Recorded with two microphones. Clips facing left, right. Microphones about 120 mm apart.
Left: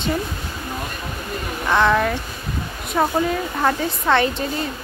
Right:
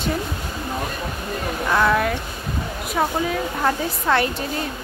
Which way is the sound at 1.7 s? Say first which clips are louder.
Left 2 dB; 5° right (ahead or behind).